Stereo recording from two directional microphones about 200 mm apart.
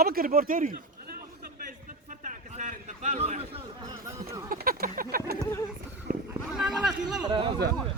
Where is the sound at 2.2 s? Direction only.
40° right (ahead or behind).